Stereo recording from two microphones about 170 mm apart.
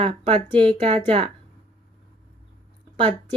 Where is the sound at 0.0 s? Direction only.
30° right (ahead or behind).